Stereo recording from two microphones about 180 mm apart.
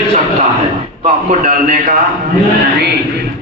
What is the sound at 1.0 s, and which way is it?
Speech, 45° right (ahead or behind).